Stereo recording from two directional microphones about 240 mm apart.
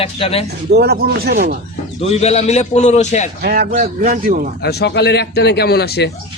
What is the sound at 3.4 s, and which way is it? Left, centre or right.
Speech, right.